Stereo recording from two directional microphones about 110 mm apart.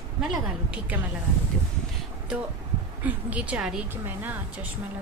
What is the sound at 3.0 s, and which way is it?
A woman's voice, 15° right (ahead or behind).